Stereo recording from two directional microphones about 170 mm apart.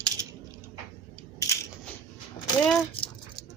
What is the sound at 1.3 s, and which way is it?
Crushing, 15° left (ahead or behind).